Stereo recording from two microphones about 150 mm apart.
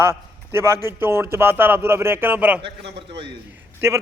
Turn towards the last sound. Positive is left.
turn(degrees=-15)  # may be behind; listen again after turning